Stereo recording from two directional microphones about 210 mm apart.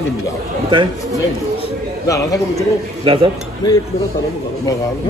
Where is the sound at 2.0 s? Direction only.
15° left (ahead or behind).